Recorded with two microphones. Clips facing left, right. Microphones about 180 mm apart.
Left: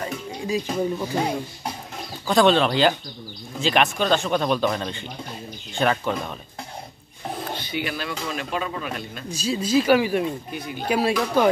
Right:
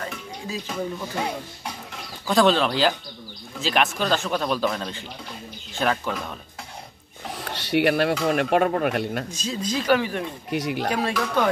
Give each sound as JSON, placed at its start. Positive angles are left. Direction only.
{"t": 0.0, "sound": "music", "side_deg": 20}
{"t": 2.2, "sound": "speech", "side_deg": 0}
{"t": 7.5, "sound": "speech", "side_deg": -75}
{"t": 9.3, "sound": "speech", "side_deg": 10}
{"t": 10.5, "sound": "speech", "side_deg": -80}
{"t": 10.9, "sound": "speech", "side_deg": 10}